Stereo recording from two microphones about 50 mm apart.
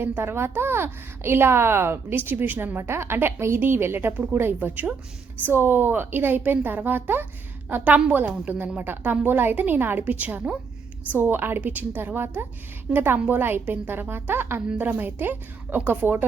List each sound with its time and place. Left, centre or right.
0.0 s a woman's voice: right
8.4 s speech: right
10.0 s a woman's voice: right